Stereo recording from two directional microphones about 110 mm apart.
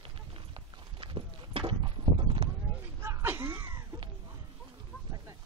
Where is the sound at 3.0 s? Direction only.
20° right (ahead or behind).